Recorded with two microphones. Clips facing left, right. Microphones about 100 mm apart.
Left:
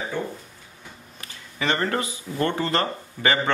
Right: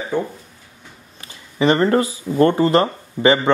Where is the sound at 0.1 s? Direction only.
15° right (ahead or behind).